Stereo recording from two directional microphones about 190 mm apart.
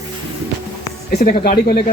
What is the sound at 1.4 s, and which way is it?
Speech, 50° left (ahead or behind).